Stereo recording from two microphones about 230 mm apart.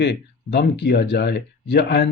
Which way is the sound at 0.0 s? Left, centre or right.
Left.